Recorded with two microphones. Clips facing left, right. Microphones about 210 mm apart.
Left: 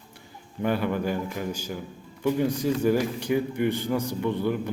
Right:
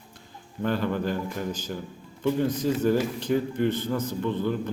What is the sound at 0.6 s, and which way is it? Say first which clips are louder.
A man's voice: left 1 dB; 10° left (ahead or behind).